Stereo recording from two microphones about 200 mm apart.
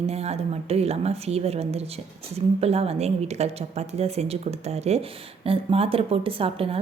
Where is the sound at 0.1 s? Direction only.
30° right (ahead or behind).